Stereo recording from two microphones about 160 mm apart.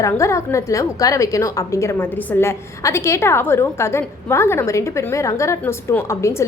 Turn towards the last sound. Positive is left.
turn(degrees=15)  # may be behind; listen again after turning